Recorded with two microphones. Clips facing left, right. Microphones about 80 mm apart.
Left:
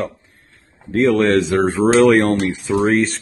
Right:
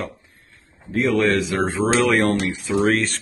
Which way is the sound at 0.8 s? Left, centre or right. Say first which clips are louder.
Left 4 dB; left.